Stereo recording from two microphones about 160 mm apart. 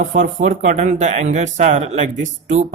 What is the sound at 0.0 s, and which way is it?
Speech, 50° right (ahead or behind).